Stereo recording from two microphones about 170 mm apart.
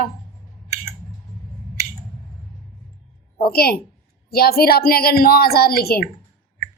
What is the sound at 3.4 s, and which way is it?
A woman's voice, 65° left (ahead or behind).